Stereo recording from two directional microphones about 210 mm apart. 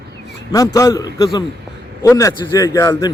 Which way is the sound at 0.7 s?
15° left (ahead or behind).